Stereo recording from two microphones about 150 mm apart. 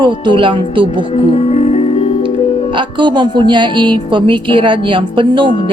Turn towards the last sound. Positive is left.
turn(degrees=-35)  # may be behind; listen again after turning